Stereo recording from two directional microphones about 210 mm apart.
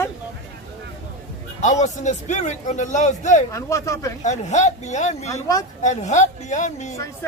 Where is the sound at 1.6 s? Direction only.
35° left (ahead or behind).